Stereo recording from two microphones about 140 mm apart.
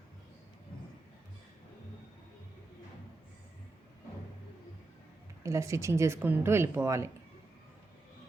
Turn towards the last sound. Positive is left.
turn(degrees=-20)  # may be behind; listen again after turning